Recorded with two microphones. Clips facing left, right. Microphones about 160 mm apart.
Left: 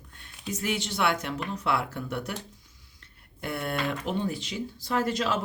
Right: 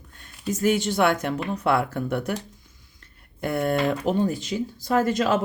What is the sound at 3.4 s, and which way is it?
Speech, 45° right (ahead or behind).